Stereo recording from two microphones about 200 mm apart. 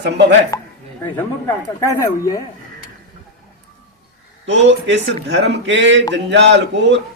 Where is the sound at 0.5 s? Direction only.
15° left (ahead or behind).